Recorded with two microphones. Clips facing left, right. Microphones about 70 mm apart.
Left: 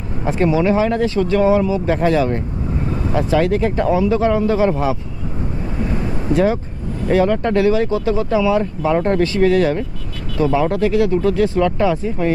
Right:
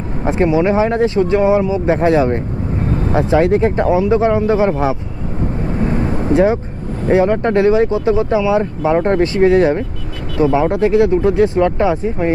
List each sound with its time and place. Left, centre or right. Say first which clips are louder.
0.3 s speech: right 2 dB; right
6.2 s speech: right 3 dB; right
8.9 s speech: right 2 dB; right